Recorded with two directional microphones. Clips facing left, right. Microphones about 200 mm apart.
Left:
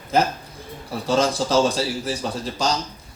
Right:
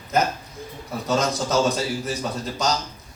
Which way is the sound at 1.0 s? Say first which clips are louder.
Left 3 dB; 30° left (ahead or behind).